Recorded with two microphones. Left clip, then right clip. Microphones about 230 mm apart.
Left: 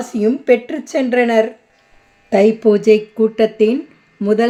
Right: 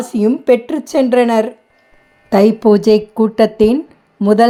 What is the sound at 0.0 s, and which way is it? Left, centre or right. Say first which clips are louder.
Speech: right 2 dB; centre.